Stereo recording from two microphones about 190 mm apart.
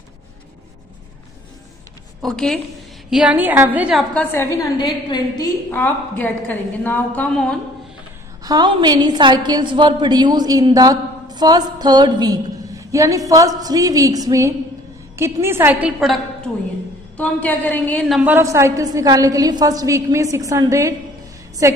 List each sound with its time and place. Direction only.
2.2 s a woman's voice: 5° left (ahead or behind)
4.1 s a woman's voice: 10° left (ahead or behind)
4.7 s a woman's voice: 20° left (ahead or behind)
5.7 s a woman's voice: 10° left (ahead or behind)
8.5 s a woman's voice: 20° right (ahead or behind); by 16.2 s 5° right (ahead or behind)
17.2 s a woman's voice: 5° left (ahead or behind); by 21.8 s 15° right (ahead or behind)